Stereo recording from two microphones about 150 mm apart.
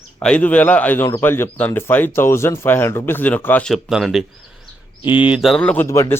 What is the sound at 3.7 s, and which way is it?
A man's voice, centre (ahead or behind).